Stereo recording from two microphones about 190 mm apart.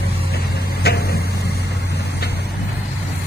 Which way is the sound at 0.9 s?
55° left (ahead or behind).